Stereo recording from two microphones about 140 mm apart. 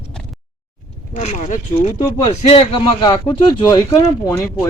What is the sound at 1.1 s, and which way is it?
Speech, 60° left (ahead or behind).